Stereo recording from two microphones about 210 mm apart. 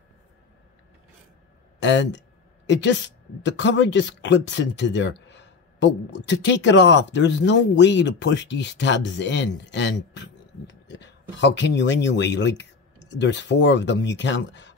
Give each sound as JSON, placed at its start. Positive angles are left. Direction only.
{"t": 1.8, "sound": "speech", "side_deg": 55}